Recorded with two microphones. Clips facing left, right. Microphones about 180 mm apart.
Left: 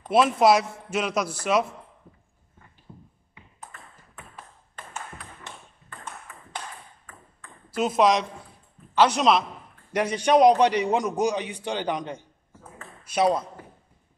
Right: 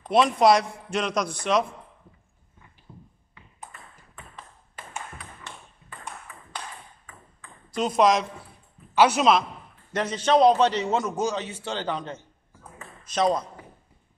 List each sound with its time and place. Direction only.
0.0 s a man's voice: 5° left (ahead or behind)
7.1 s ping: 5° left (ahead or behind)
8.9 s a man's voice: 5° right (ahead or behind)
9.9 s a man's voice: 10° left (ahead or behind)